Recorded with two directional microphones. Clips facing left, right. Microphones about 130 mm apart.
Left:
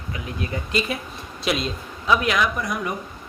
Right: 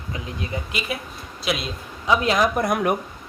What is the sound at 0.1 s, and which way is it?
Speech, 25° right (ahead or behind).